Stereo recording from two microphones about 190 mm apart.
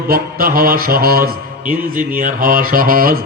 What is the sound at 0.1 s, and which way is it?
Mantra, 50° right (ahead or behind).